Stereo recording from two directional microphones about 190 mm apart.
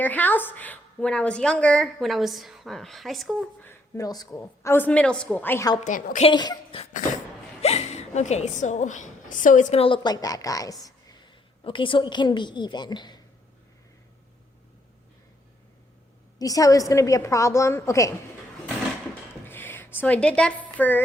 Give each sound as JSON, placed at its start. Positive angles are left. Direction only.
{"t": 0.0, "sound": "a woman's voice", "side_deg": 10}
{"t": 3.7, "sound": "a woman's voice", "side_deg": 15}
{"t": 5.8, "sound": "a woman's voice", "side_deg": 45}
{"t": 6.2, "sound": "a woman's voice", "side_deg": 20}
{"t": 16.4, "sound": "a woman's voice", "side_deg": 20}
{"t": 19.5, "sound": "speech", "side_deg": 10}